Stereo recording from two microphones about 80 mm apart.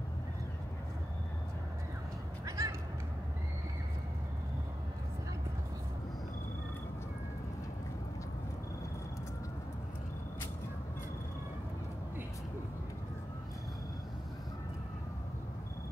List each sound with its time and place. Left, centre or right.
2.4 s crow: right